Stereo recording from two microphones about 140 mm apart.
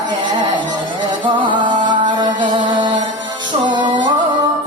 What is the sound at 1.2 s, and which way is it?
Music, 35° right (ahead or behind).